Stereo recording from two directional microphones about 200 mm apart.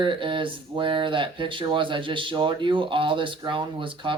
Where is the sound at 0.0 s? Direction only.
25° right (ahead or behind).